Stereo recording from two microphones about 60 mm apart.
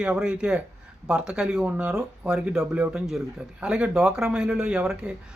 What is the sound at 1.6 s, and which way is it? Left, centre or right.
Speech, right.